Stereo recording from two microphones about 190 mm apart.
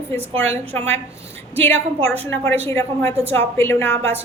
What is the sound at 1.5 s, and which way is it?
A woman's voice, 10° left (ahead or behind).